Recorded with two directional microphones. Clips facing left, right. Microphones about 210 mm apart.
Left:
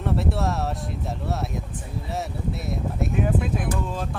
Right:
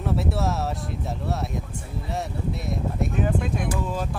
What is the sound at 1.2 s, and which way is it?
Speech, centre (ahead or behind).